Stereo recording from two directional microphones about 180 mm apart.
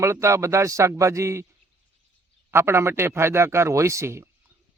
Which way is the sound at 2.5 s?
15° right (ahead or behind).